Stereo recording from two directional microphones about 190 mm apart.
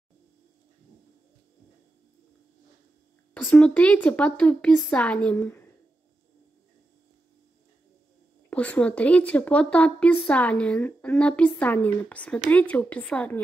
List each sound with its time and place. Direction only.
3.4 s speech: 10° left (ahead or behind)
8.5 s speech: 5° left (ahead or behind)